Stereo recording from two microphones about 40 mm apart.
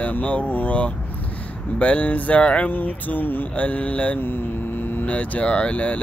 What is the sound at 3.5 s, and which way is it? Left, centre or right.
Speech, left.